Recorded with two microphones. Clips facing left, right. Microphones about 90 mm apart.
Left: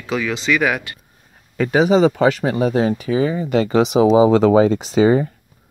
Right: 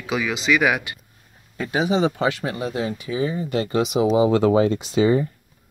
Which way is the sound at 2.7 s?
90° left.